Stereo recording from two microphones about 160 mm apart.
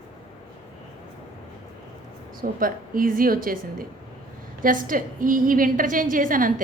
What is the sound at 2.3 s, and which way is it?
A woman's voice, 60° right (ahead or behind).